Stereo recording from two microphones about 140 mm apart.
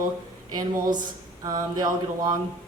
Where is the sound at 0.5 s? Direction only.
30° right (ahead or behind).